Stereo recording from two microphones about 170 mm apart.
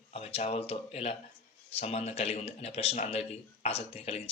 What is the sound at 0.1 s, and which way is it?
Speech, 35° left (ahead or behind).